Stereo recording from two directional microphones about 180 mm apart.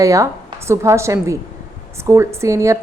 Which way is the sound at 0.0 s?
20° right (ahead or behind).